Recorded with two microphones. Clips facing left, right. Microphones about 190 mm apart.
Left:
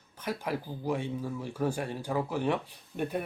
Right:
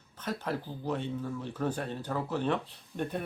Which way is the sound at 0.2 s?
10° left (ahead or behind).